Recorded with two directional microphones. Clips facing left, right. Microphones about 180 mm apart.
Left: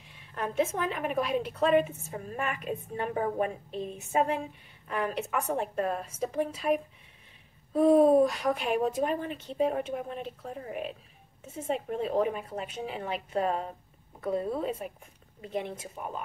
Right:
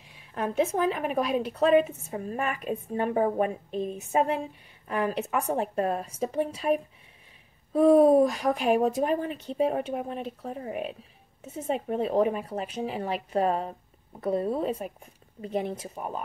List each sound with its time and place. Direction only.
0.3 s a woman's voice: 40° right (ahead or behind)
7.7 s a woman's voice: 45° right (ahead or behind)